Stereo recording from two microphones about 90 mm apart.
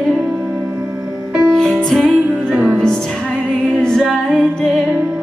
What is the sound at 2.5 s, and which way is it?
Music, 20° right (ahead or behind).